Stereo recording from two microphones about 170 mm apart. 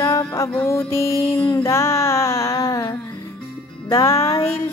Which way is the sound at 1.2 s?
30° left (ahead or behind).